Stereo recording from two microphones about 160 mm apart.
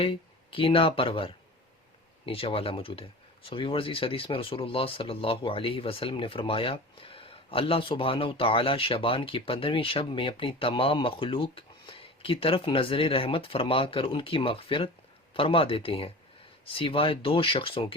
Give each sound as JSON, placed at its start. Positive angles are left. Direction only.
{"t": 0.0, "sound": "speech", "side_deg": 35}